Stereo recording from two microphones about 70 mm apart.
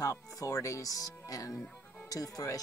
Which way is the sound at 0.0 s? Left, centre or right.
Left.